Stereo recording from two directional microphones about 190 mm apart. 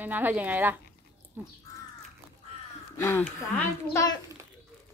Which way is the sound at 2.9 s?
15° left (ahead or behind).